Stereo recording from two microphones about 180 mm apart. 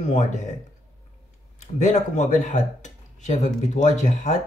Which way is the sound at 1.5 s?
40° left (ahead or behind).